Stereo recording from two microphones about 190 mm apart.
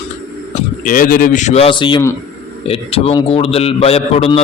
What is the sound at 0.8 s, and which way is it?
Speech, 45° left (ahead or behind).